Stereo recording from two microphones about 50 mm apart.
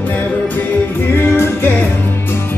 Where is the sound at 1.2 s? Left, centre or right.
Left.